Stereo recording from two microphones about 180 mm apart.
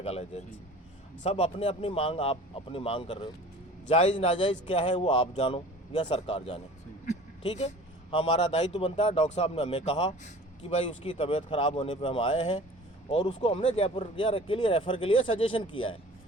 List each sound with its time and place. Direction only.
0.0 s speech: 35° left (ahead or behind)
7.0 s a sound: 40° left (ahead or behind)
8.2 s speech: 35° left (ahead or behind)